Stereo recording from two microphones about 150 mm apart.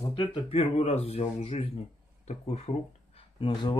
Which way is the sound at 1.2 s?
35° left (ahead or behind).